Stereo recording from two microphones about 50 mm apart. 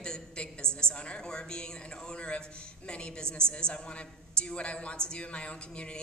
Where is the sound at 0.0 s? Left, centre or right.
Centre.